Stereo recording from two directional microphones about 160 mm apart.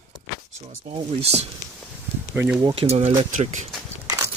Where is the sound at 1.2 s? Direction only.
40° right (ahead or behind).